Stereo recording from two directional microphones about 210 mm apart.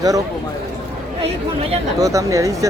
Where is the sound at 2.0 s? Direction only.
15° right (ahead or behind).